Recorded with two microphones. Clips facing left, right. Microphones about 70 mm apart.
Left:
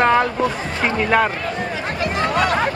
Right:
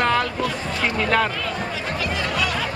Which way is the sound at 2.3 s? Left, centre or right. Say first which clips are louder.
Left 6 dB; left.